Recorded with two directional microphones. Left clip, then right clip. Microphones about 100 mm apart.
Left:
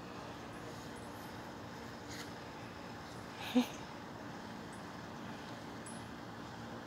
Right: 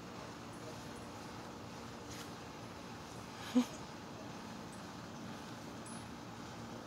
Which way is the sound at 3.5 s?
20° right (ahead or behind).